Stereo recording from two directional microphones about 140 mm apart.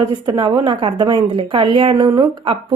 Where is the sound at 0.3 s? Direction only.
30° right (ahead or behind).